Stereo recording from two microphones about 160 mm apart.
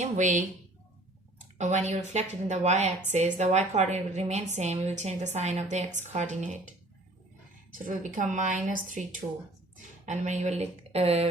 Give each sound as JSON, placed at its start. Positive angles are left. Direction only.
{"t": 0.0, "sound": "a woman's voice", "side_deg": -50}
{"t": 1.5, "sound": "a woman's voice", "side_deg": -45}
{"t": 7.9, "sound": "a woman's voice", "side_deg": -55}
{"t": 10.1, "sound": "a woman's voice", "side_deg": -45}